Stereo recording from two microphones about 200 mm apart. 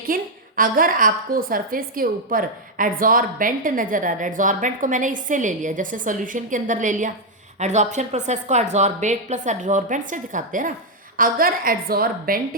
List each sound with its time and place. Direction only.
0.0 s a woman's voice: 45° right (ahead or behind)